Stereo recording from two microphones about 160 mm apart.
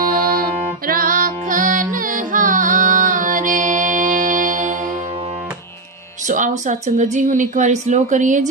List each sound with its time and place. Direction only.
0.9 s music: 60° right (ahead or behind)
6.2 s speech: 50° right (ahead or behind)